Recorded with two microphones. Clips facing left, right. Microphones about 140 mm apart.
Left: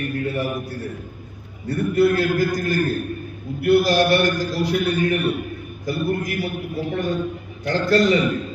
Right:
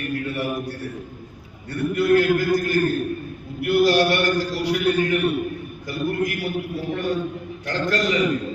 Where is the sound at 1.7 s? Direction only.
35° left (ahead or behind).